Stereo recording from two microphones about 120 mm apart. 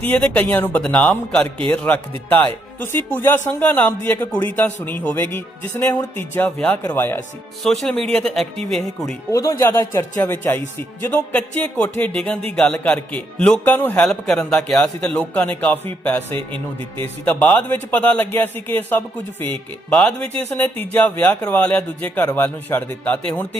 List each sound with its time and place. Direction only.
0.0 s a man's voice: 15° left (ahead or behind)
7.6 s speech: 5° left (ahead or behind)
9.3 s a man's voice: 30° left (ahead or behind)
14.1 s a man's voice: 5° left (ahead or behind)